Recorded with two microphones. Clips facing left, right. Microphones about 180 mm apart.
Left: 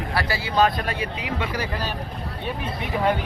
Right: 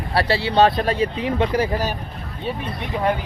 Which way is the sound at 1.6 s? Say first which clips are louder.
Right 7 dB; 45° right (ahead or behind).